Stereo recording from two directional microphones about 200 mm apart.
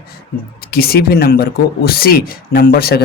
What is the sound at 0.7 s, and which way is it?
Speech, 50° left (ahead or behind).